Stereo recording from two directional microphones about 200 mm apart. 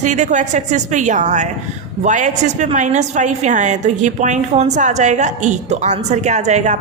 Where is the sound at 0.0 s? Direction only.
35° right (ahead or behind).